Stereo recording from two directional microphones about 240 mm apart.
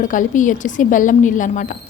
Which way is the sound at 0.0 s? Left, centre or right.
Left.